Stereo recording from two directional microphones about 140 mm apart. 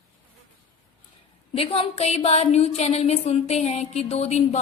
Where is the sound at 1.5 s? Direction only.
45° left (ahead or behind).